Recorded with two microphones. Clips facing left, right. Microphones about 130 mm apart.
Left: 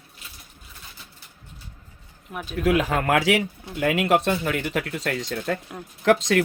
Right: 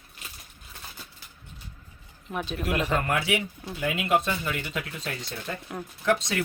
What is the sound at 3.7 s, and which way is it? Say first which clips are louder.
Speech: left 5 dB; 65° left (ahead or behind).